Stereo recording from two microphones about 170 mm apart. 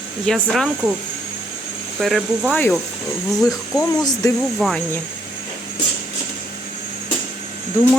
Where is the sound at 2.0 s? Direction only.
Centre (ahead or behind).